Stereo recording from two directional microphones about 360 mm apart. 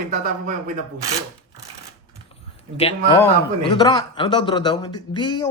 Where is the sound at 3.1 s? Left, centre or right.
Centre.